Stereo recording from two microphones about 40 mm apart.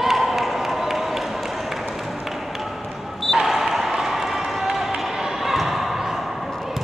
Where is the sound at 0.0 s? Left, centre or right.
Centre.